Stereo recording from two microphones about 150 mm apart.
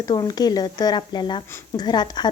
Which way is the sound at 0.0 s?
25° left (ahead or behind).